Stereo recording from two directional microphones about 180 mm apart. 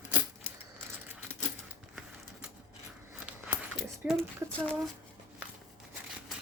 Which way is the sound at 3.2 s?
5° right (ahead or behind).